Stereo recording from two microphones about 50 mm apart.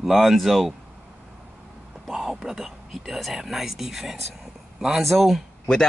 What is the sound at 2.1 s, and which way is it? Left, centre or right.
Speech, centre.